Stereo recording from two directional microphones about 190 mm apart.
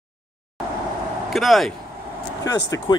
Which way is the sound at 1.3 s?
Centre (ahead or behind).